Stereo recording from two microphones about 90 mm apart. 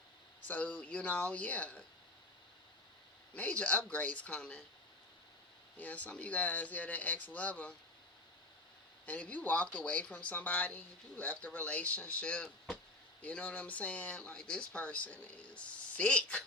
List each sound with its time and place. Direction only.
0.4 s speech: 15° left (ahead or behind)
3.3 s speech: 15° left (ahead or behind)
5.7 s speech: 15° left (ahead or behind)
9.0 s speech: 15° left (ahead or behind)